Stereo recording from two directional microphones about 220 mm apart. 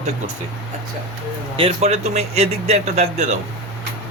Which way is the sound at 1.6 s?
25° right (ahead or behind).